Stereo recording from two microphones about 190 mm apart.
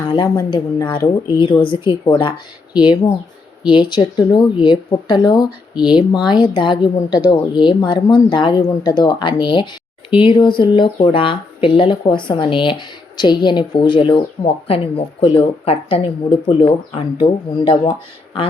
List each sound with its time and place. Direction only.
0.1 s speech: 25° left (ahead or behind)